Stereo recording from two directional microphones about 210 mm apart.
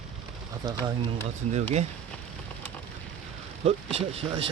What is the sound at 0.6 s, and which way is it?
Speech, 20° right (ahead or behind).